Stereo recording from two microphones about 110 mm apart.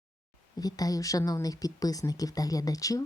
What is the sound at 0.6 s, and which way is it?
Speech, 35° left (ahead or behind).